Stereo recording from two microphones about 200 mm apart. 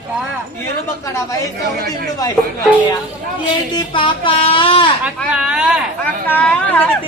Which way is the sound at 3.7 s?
25° left (ahead or behind).